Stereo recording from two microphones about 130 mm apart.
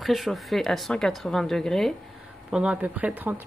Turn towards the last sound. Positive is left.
turn(degrees=-15)  # may be behind; listen again after turning